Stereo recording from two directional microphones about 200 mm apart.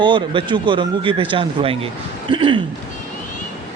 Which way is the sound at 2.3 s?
25° right (ahead or behind).